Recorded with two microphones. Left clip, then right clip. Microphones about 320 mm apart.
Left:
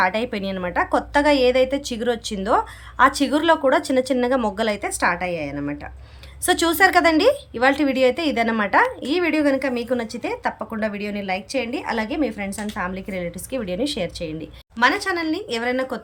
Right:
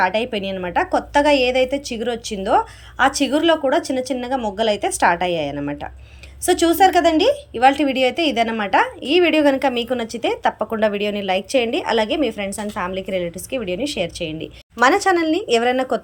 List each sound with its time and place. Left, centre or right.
0.0 s a woman's voice: centre